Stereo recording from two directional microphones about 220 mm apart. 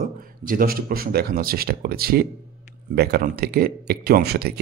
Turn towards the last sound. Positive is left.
turn(degrees=-45)  # may be behind; listen again after turning